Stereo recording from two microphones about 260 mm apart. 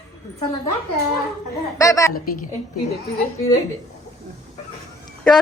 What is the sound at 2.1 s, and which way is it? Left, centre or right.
Speech, left.